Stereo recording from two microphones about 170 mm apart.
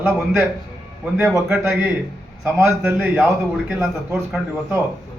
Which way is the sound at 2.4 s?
15° right (ahead or behind).